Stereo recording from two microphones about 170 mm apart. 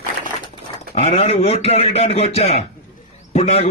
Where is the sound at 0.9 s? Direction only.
35° left (ahead or behind).